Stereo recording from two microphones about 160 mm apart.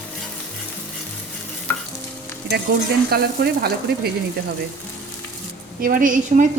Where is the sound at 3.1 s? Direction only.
80° right.